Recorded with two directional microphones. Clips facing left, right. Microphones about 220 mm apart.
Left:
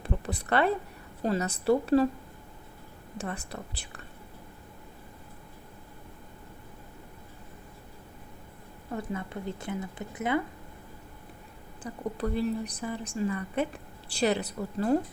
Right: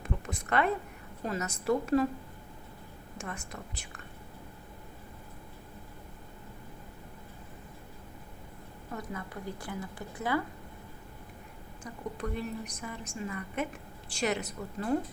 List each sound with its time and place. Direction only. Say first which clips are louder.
0.0 s a sound: left 4 dB; 35° left (ahead or behind)
1.2 s a woman's voice: left 6 dB; 30° left (ahead or behind)
3.2 s a woman's voice: left 5 dB; 35° left (ahead or behind)
9.0 s a woman's voice: left 5 dB; 25° left (ahead or behind)
11.8 s a woman's voice: left 5 dB; 35° left (ahead or behind)